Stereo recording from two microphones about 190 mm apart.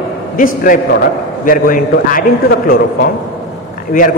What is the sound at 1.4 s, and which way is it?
A man's voice, 45° left (ahead or behind).